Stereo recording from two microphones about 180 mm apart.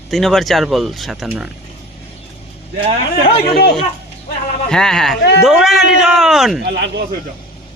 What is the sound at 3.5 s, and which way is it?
Speech, 65° left (ahead or behind).